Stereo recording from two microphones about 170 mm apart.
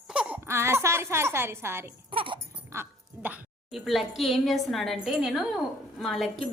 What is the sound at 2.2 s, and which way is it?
Sheep, 30° right (ahead or behind).